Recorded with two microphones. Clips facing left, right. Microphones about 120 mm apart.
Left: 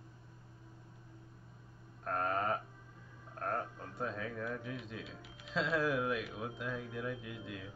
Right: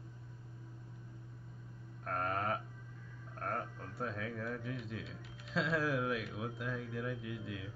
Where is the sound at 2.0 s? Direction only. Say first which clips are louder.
Left 2 dB; centre (ahead or behind).